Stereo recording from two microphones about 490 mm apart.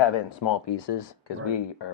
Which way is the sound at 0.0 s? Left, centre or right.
Left.